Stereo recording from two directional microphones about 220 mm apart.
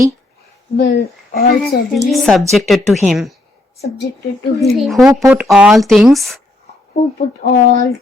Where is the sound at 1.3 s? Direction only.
45° left (ahead or behind).